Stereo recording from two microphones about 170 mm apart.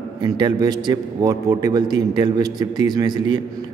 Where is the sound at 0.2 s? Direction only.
25° right (ahead or behind).